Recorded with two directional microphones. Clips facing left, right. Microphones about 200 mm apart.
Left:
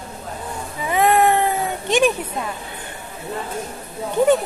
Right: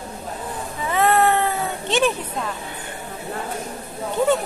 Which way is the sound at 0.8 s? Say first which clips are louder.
Left 2 dB; 15° left (ahead or behind).